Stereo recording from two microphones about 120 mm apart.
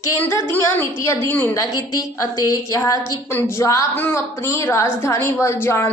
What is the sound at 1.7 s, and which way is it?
A woman's voice, 30° left (ahead or behind).